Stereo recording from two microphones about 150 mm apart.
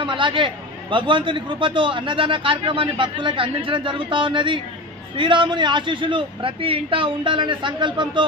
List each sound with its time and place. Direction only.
0.0 s a man's voice: 35° right (ahead or behind)